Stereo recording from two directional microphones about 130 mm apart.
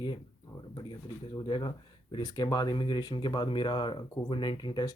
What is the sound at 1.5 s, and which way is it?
Speech, 35° left (ahead or behind).